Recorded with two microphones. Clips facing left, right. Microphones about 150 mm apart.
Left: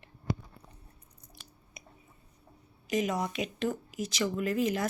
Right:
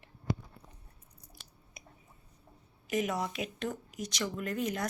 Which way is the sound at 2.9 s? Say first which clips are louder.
Left 2 dB; centre (ahead or behind).